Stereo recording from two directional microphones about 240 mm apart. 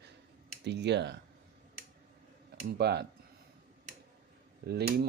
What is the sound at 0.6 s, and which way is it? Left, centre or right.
Speech, right.